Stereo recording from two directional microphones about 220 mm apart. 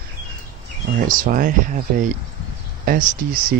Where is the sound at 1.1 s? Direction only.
40° right (ahead or behind).